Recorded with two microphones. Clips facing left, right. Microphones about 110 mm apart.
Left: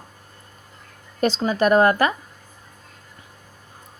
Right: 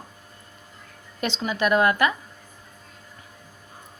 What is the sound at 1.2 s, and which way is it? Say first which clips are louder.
Speech: left 6 dB; 40° left (ahead or behind).